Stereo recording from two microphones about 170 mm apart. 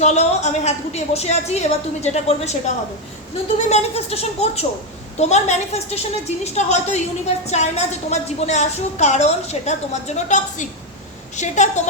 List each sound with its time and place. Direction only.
0.0 s a woman's voice: 40° left (ahead or behind)
3.7 s a woman's voice: 40° left (ahead or behind)